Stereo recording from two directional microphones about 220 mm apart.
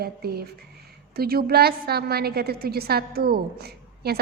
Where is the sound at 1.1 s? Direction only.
45° right (ahead or behind).